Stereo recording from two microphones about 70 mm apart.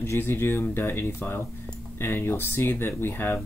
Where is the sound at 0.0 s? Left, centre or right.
Left.